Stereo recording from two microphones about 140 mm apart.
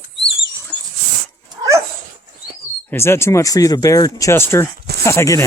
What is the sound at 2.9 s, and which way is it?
Speech, 20° left (ahead or behind).